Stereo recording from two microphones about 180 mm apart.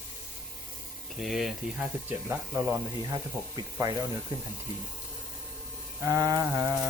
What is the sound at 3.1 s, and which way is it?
Speech, 20° right (ahead or behind).